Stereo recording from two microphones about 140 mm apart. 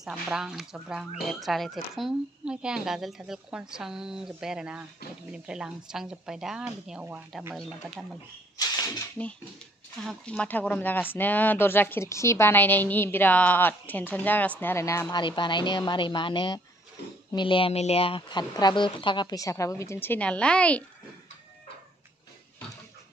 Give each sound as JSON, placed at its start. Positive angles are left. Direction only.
{"t": 0.0, "sound": "speech", "side_deg": -5}
{"t": 8.5, "sound": "a sound", "side_deg": 25}
{"t": 9.9, "sound": "a woman's voice", "side_deg": 5}